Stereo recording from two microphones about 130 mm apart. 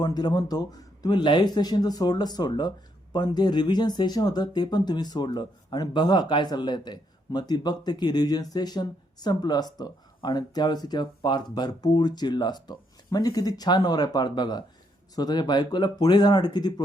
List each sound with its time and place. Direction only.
0.0 s speech: 30° left (ahead or behind)